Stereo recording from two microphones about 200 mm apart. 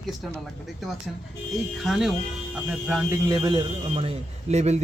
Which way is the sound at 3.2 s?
20° right (ahead or behind).